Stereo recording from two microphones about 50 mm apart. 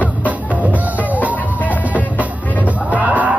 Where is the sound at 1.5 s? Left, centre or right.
Left.